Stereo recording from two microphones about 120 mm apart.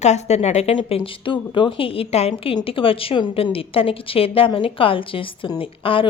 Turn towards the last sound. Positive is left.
turn(degrees=50)  # may be behind; listen again after turning